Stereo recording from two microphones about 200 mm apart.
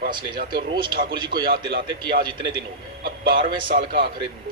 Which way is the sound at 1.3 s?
50° right (ahead or behind).